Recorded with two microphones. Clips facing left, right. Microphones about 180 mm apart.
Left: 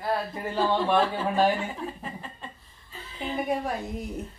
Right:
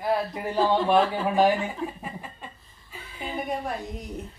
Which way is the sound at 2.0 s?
10° right (ahead or behind).